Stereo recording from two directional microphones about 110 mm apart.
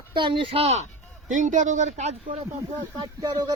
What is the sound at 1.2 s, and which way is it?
Speech, 90° right.